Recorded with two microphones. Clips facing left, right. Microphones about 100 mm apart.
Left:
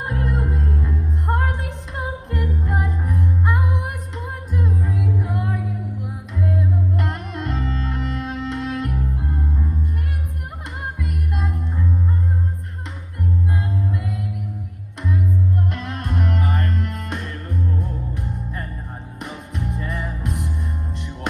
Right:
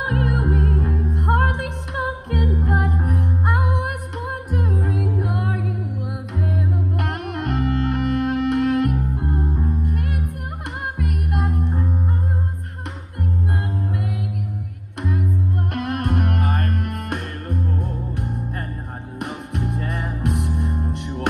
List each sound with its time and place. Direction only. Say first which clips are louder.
0.0 s music: right 3 dB; 60° right (ahead or behind)
15.0 s music: left 1 dB; 55° right (ahead or behind)
19.1 s music: right 4 dB; 60° right (ahead or behind)